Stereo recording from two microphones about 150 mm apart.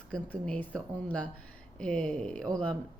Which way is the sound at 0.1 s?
10° left (ahead or behind).